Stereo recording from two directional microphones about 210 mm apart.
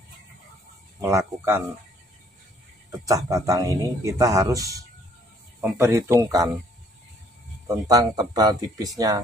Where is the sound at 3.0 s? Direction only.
15° right (ahead or behind).